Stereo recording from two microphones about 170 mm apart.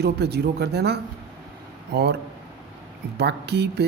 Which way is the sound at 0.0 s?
75° right (ahead or behind).